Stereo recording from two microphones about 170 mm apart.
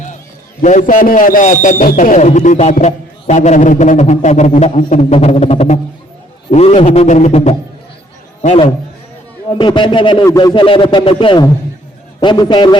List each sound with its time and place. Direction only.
0.6 s a man's voice: 45° left (ahead or behind); by 12.8 s 25° left (ahead or behind)